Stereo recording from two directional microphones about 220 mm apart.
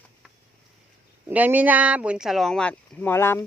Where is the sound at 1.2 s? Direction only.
10° right (ahead or behind); by 3.4 s 10° left (ahead or behind).